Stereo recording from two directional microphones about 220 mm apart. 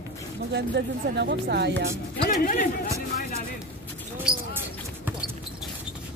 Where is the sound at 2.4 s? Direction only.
35° left (ahead or behind).